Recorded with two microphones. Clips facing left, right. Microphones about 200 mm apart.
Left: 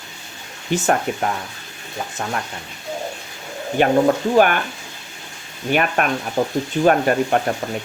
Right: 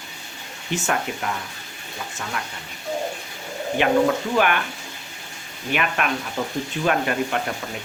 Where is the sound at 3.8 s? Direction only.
40° left (ahead or behind).